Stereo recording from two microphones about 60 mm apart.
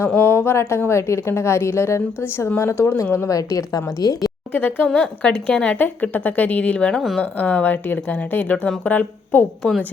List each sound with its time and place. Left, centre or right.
0.2 s a woman's voice: left
3.2 s a woman's voice: left
4.5 s speech: left
4.9 s a woman's voice: centre
5.7 s speech: left
6.9 s a woman's voice: centre
7.2 s speech: left